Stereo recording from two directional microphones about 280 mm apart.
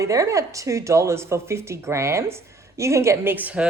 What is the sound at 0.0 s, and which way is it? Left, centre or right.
Speech, centre.